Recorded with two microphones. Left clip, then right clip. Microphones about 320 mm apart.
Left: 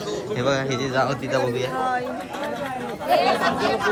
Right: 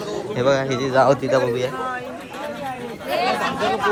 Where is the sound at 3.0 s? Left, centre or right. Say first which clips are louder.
Left 2 dB; centre.